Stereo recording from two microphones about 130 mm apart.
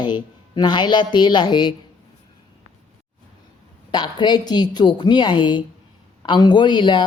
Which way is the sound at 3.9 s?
35° left (ahead or behind).